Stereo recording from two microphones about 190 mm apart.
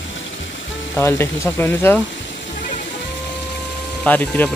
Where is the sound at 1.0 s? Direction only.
10° left (ahead or behind).